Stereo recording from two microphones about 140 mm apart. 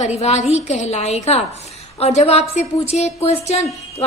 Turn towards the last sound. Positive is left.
turn(degrees=50)  # may be behind; listen again after turning